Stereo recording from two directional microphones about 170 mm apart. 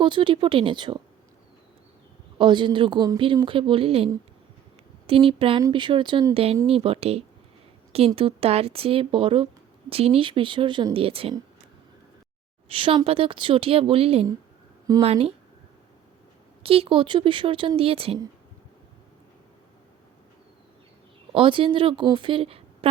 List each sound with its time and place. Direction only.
0.0 s speech: 30° right (ahead or behind)
2.4 s a woman's voice: 25° right (ahead or behind)
12.6 s a woman's voice: 30° right (ahead or behind)
16.6 s a woman's voice: 35° right (ahead or behind)
21.3 s a woman's voice: 30° right (ahead or behind)